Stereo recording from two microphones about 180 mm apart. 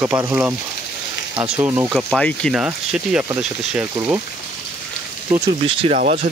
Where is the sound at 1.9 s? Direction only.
Centre (ahead or behind).